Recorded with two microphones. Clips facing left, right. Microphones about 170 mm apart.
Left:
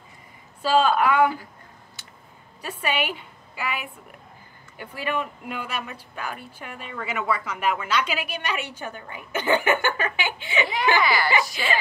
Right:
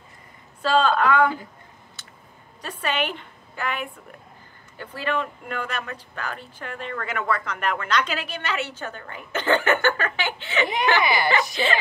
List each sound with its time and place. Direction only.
0.6 s speech: 10° left (ahead or behind)
2.6 s a woman's voice: 10° left (ahead or behind)
11.0 s speech: 20° right (ahead or behind)